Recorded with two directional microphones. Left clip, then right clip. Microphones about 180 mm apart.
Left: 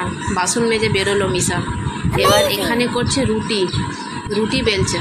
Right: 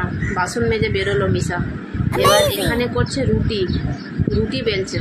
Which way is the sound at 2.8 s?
15° left (ahead or behind).